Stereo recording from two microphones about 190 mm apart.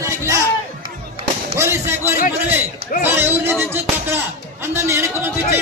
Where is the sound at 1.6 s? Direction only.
15° right (ahead or behind).